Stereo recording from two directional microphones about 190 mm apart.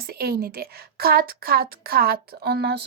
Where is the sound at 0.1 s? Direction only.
55° right (ahead or behind).